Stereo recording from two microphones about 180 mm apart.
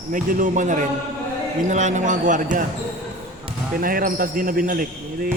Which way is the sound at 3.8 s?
50° right (ahead or behind).